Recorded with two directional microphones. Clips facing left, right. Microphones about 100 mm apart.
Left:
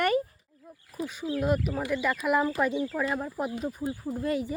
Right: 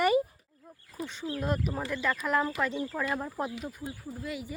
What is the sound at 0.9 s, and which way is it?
Speech, 10° left (ahead or behind).